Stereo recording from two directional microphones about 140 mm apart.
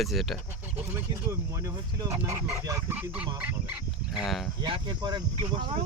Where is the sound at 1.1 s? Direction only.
20° right (ahead or behind).